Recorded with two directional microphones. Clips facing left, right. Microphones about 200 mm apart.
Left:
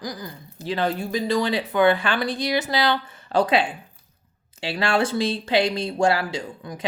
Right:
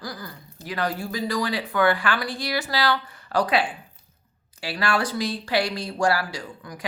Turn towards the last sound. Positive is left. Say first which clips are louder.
# left 5 dB
turn(degrees=25)  # may be behind; listen again after turning